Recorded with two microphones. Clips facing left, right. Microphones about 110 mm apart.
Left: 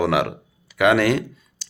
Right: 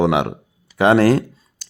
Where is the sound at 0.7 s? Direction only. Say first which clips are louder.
Right 4 dB; 30° right (ahead or behind).